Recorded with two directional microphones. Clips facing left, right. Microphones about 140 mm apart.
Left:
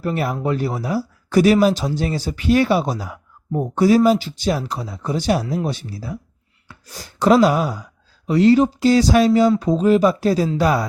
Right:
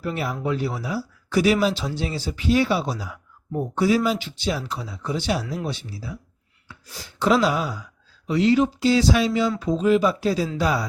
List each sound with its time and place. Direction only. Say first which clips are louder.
0.0 s speech: left 5 dB; 50° left (ahead or behind)